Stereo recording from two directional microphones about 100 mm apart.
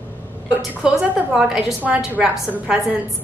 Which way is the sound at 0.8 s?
5° right (ahead or behind).